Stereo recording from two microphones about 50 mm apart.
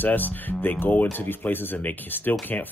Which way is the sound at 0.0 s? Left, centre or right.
Left.